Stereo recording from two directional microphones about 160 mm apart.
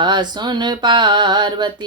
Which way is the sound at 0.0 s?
30° right (ahead or behind).